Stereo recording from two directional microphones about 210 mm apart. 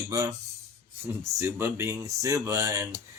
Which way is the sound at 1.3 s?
10° right (ahead or behind).